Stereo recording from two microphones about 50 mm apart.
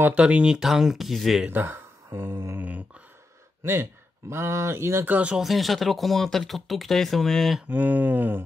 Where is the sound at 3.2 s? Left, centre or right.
Right.